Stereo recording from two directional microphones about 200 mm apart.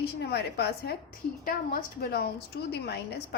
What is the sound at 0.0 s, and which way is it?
A woman's voice, 55° left (ahead or behind).